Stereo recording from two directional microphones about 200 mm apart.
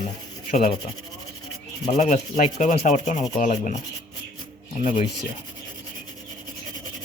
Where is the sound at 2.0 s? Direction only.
35° left (ahead or behind).